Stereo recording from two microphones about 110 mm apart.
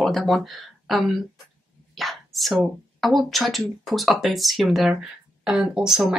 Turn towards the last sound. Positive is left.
turn(degrees=-5)  # may be behind; listen again after turning